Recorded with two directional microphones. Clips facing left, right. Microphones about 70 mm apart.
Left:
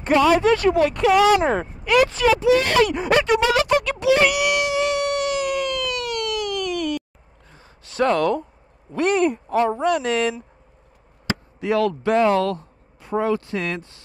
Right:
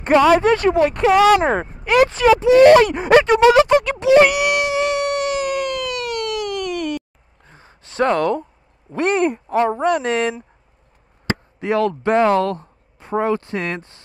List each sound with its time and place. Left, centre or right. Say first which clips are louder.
0.0 s speech: right 3 dB; right
1.2 s speech: right 5 dB; right
1.5 s a sound: right 2 dB; right
7.4 s gasp: right 3 dB; right
8.9 s speech: right 1 dB; right